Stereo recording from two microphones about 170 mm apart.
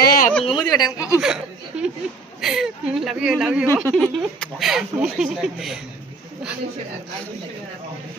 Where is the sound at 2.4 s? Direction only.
Centre (ahead or behind).